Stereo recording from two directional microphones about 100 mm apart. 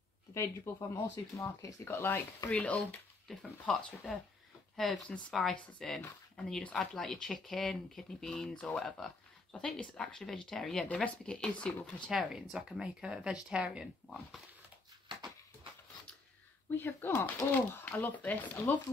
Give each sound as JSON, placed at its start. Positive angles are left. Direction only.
{"t": 0.3, "sound": "speech", "side_deg": 30}
{"t": 12.1, "sound": "speech", "side_deg": -5}
{"t": 15.0, "sound": "a sound", "side_deg": -55}
{"t": 16.7, "sound": "speech", "side_deg": 20}